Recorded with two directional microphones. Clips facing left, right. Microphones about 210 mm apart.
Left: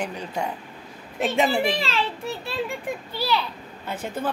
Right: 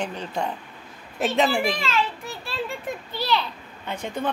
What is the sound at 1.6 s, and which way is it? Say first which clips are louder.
Speech: even; 30° left (ahead or behind).